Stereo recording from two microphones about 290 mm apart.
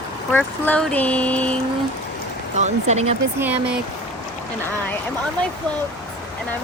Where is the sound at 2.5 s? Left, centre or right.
Right.